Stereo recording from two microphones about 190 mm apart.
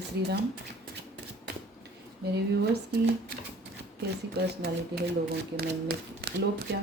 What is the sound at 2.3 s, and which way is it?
Speech, 60° right (ahead or behind).